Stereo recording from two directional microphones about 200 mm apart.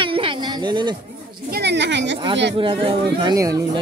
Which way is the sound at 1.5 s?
55° right (ahead or behind).